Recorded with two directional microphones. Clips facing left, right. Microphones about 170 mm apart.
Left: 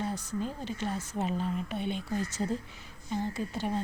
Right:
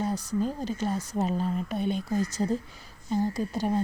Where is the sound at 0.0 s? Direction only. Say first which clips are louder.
Right 5 dB; 35° right (ahead or behind).